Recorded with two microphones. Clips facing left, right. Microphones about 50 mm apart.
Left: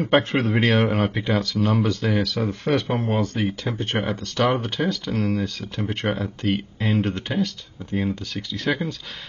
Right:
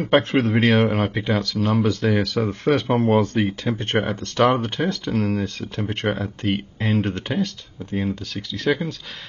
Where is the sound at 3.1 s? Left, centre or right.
Right.